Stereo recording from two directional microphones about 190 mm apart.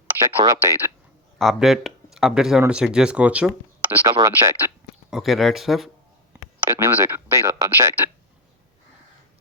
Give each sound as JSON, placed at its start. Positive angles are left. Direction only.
{"t": 0.4, "sound": "speech", "side_deg": -15}
{"t": 1.4, "sound": "speech", "side_deg": 0}
{"t": 4.0, "sound": "speech", "side_deg": -20}
{"t": 5.1, "sound": "speech", "side_deg": 0}
{"t": 6.3, "sound": "speech", "side_deg": -10}